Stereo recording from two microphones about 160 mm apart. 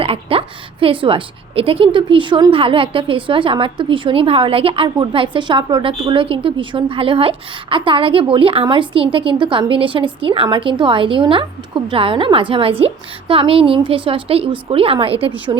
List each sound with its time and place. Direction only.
0.0 s a woman's voice: 35° right (ahead or behind)